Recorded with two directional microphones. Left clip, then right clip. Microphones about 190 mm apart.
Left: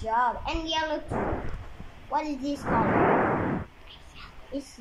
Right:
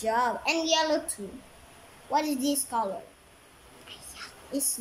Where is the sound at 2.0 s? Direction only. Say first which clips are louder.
Right 2 dB; 25° right (ahead or behind).